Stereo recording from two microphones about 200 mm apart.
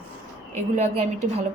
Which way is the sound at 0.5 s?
30° right (ahead or behind).